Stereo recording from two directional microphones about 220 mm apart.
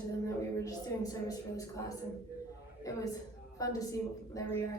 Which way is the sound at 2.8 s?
15° left (ahead or behind).